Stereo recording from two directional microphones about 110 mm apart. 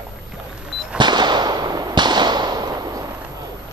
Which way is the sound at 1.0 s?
40° right (ahead or behind).